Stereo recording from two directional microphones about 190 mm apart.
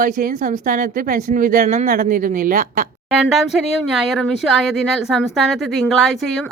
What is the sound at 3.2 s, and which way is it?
Speech, centre (ahead or behind).